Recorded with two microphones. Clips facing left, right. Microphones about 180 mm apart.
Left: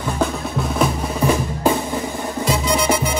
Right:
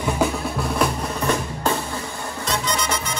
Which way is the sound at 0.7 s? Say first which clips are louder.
Left 5 dB; 10° left (ahead or behind).